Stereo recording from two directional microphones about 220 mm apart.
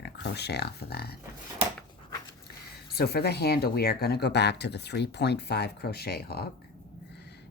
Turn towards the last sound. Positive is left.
turn(degrees=50)  # may be behind; listen again after turning